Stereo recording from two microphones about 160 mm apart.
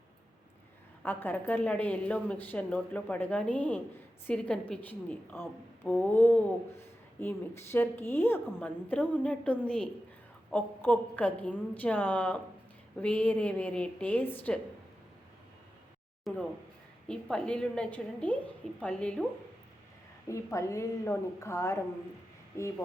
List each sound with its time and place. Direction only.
1.0 s a woman's voice: 10° left (ahead or behind)
16.2 s a woman's voice: 10° left (ahead or behind)
20.2 s speech: 20° left (ahead or behind)